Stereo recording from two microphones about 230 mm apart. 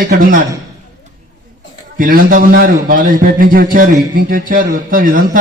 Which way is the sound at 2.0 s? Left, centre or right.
Right.